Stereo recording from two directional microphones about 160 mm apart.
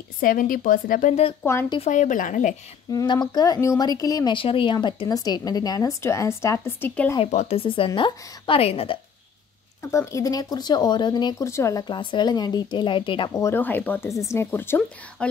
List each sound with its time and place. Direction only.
0.2 s a woman's voice: 60° left (ahead or behind)
1.4 s speech: 15° left (ahead or behind)
1.8 s speech: 50° left (ahead or behind)
2.9 s speech: 25° left (ahead or behind)
7.2 s a woman's voice: 45° left (ahead or behind)
9.8 s speech: 20° left (ahead or behind)
11.9 s speech: 30° left (ahead or behind)
13.4 s speech: 15° left (ahead or behind)